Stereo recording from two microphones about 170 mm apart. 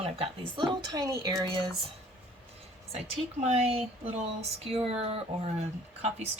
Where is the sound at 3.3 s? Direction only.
40° right (ahead or behind).